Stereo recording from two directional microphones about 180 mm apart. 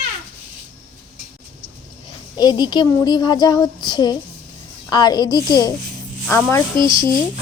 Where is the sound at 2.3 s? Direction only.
20° left (ahead or behind).